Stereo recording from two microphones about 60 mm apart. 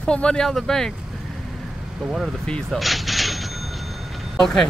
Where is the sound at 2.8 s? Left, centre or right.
Centre.